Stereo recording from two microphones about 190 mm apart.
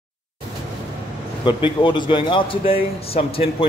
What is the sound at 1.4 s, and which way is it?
A man's voice, 25° left (ahead or behind).